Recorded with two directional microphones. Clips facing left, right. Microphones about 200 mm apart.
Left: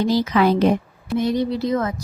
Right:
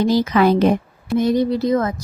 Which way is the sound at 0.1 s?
50° right (ahead or behind).